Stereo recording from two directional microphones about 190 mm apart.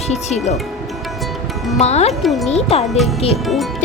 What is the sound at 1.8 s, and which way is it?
Speech, 35° left (ahead or behind).